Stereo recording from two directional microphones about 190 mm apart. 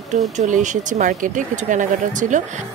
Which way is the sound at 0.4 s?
40° right (ahead or behind).